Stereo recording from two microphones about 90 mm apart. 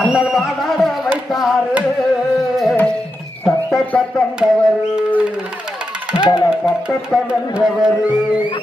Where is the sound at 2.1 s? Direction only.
Centre (ahead or behind).